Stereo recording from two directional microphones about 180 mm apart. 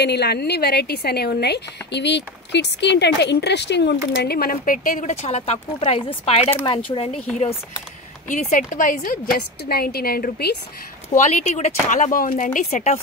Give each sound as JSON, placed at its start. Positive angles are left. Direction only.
{"t": 0.0, "sound": "a woman's voice", "side_deg": 65}
{"t": 8.3, "sound": "a woman's voice", "side_deg": 45}
{"t": 11.1, "sound": "speech", "side_deg": 40}